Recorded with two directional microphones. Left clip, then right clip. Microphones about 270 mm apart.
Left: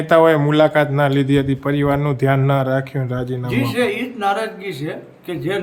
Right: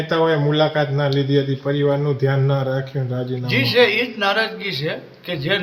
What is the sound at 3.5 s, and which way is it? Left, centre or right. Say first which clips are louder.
A man's voice: right 5 dB; centre.